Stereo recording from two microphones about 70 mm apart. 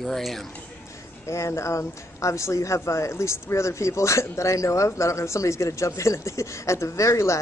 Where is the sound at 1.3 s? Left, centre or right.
Left.